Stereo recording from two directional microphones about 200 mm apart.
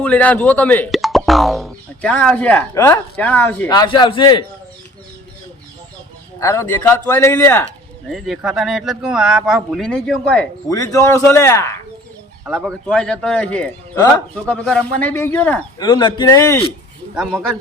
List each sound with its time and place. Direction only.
0.0 s speech: 5° left (ahead or behind)
3.7 s a man's voice: 20° left (ahead or behind)
6.4 s speech: 15° left (ahead or behind)
8.1 s speech: centre (ahead or behind)
10.7 s speech: 15° left (ahead or behind)
12.5 s speech: centre (ahead or behind)
15.8 s a man's voice: 25° left (ahead or behind)
17.2 s speech: 5° left (ahead or behind)